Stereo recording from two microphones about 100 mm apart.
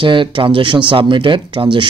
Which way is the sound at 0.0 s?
55° right (ahead or behind).